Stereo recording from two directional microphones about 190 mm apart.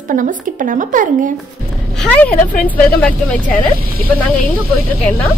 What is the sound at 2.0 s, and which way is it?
Speech, 5° left (ahead or behind).